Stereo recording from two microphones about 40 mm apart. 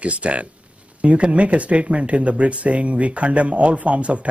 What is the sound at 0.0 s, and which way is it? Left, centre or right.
Speech, right.